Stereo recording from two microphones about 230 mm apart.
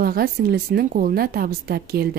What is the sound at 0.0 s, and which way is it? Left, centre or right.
Speech, right.